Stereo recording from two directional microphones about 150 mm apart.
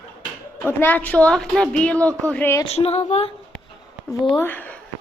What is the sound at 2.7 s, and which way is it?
Speech, 45° left (ahead or behind).